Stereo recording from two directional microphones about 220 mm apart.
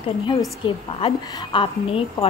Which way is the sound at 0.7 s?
25° left (ahead or behind).